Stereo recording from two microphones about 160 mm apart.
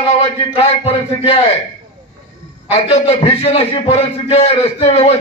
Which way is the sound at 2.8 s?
40° left (ahead or behind).